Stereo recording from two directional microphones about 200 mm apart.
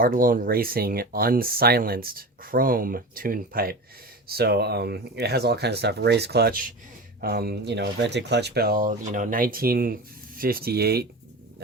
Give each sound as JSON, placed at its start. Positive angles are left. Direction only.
{"t": 0.0, "sound": "speech", "side_deg": -45}